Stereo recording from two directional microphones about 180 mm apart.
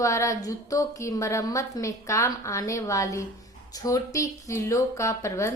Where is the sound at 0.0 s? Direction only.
15° left (ahead or behind).